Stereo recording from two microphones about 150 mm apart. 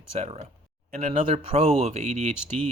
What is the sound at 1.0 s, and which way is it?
Speech, 55° right (ahead or behind).